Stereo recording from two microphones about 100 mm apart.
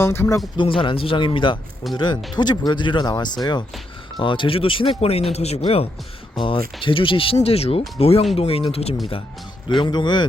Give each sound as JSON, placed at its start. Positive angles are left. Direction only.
{"t": 0.0, "sound": "speech", "side_deg": 25}
{"t": 0.5, "sound": "speech", "side_deg": 60}
{"t": 4.2, "sound": "speech", "side_deg": 60}
{"t": 6.3, "sound": "speech", "side_deg": 60}
{"t": 9.6, "sound": "speech", "side_deg": 50}